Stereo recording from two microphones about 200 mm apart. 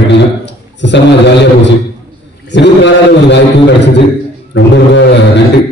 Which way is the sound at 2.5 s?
60° left (ahead or behind).